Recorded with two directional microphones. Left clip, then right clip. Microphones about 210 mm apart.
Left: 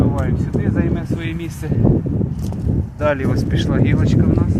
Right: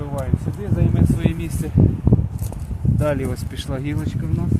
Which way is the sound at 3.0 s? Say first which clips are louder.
Left 5 dB; 15° right (ahead or behind).